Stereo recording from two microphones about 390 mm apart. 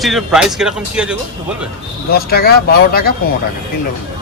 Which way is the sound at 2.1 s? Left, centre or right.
Left.